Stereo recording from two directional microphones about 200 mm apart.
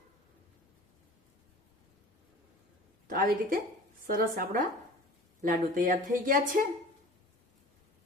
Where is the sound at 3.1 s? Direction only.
45° right (ahead or behind).